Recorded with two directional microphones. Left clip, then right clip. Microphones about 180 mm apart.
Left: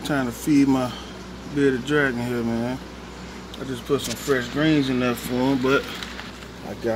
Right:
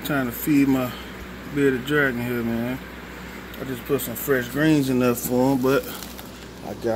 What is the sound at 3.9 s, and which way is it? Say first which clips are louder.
Speech: even; 10° right (ahead or behind).